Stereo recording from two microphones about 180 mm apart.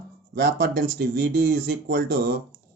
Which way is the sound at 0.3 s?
60° right (ahead or behind).